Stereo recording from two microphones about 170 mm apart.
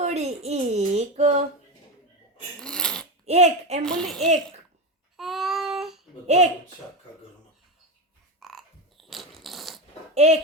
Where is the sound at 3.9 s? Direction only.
5° left (ahead or behind).